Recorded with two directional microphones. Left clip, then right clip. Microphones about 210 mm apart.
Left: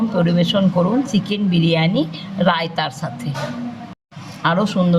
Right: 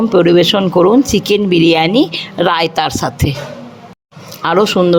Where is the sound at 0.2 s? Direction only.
45° right (ahead or behind).